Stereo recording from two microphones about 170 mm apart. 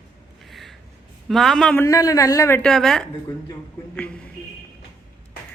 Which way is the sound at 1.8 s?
20° left (ahead or behind).